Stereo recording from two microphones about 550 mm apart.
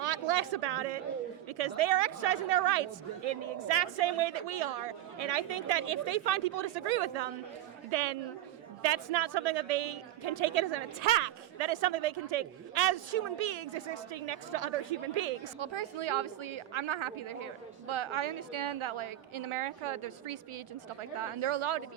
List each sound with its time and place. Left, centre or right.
0.0 s a sound: right
1.5 s a man's voice: right
7.9 s a man's voice: right
15.5 s a woman's voice: right